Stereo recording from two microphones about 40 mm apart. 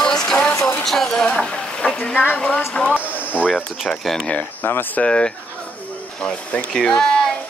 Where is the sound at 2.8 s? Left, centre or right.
Left.